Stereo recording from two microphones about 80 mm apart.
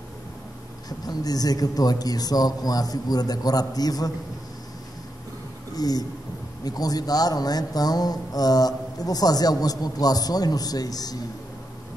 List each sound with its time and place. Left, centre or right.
0.8 s speech: left
5.8 s speech: left